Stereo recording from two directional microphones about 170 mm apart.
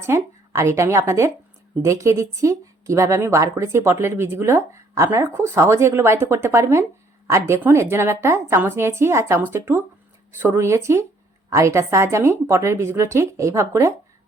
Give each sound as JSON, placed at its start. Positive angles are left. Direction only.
{"t": 0.0, "sound": "speech", "side_deg": -15}